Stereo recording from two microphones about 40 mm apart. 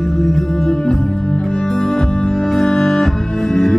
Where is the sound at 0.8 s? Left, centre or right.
Left.